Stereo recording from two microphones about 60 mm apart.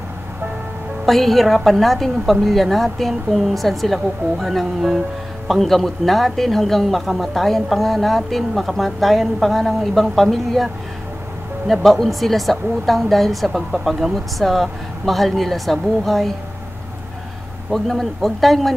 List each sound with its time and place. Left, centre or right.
1.0 s speech: centre
17.6 s speech: centre